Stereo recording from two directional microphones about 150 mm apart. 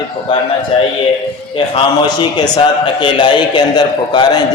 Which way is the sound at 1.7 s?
30° left (ahead or behind).